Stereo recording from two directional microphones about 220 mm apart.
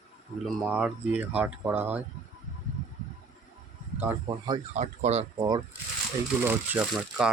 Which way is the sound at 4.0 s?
10° right (ahead or behind).